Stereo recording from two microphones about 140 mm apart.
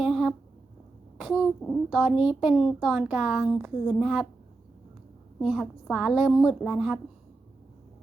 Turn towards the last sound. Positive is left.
turn(degrees=-5)  # may be behind; listen again after turning